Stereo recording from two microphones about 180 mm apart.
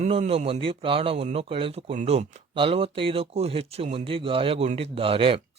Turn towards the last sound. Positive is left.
turn(degrees=-30)  # may be behind; listen again after turning